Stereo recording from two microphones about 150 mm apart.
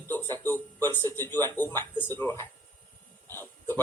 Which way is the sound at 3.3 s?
15° left (ahead or behind).